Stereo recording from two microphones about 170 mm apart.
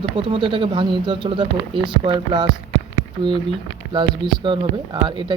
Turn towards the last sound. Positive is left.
turn(degrees=-30)  # may be behind; listen again after turning